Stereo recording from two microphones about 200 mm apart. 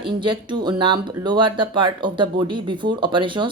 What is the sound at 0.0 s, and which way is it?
Speech, 25° right (ahead or behind).